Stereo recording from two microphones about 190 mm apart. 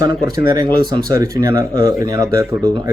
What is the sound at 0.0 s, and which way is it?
Speech, 20° right (ahead or behind).